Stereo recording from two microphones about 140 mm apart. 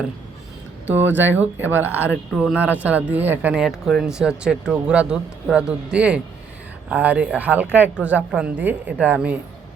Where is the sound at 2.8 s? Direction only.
10° right (ahead or behind).